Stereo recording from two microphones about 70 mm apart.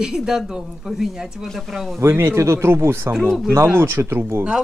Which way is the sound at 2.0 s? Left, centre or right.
Right.